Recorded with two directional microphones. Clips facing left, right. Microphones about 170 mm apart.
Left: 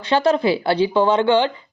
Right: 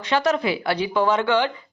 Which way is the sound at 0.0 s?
30° left (ahead or behind).